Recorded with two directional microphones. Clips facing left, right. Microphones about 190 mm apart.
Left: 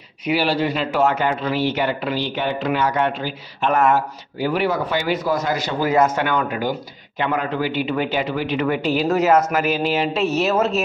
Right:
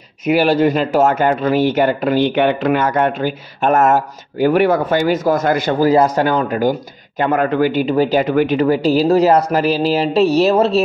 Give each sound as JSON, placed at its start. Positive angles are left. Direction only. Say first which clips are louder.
{"t": 0.2, "sound": "speech", "louder": "right 7 dB", "side_deg": -50}
{"t": 5.8, "sound": "speech", "louder": "right 4 dB", "side_deg": -35}